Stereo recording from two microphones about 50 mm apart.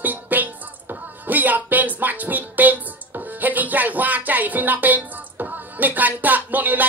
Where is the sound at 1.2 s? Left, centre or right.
Right.